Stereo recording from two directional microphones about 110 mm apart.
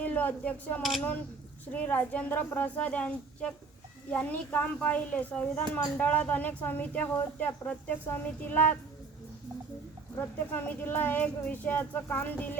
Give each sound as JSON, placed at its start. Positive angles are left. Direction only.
{"t": 0.0, "sound": "speech", "side_deg": 15}
{"t": 0.8, "sound": "speech", "side_deg": 0}
{"t": 1.7, "sound": "speech", "side_deg": 15}
{"t": 10.2, "sound": "speech", "side_deg": 20}